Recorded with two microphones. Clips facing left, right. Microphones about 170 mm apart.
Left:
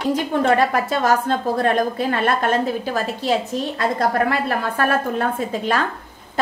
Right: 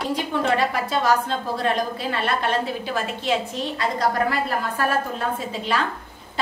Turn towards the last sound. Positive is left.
turn(degrees=50)  # may be behind; listen again after turning